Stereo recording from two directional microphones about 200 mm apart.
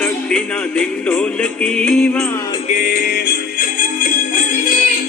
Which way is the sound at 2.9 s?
45° left (ahead or behind).